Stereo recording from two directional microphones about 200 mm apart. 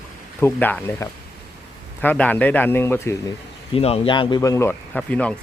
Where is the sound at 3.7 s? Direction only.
30° left (ahead or behind); by 5.3 s 5° left (ahead or behind).